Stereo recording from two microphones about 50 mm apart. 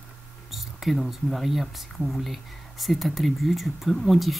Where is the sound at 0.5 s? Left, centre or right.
Centre.